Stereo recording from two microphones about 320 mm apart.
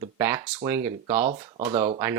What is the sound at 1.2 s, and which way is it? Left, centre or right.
Speech, right.